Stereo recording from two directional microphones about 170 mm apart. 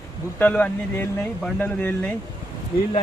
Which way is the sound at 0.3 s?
10° left (ahead or behind).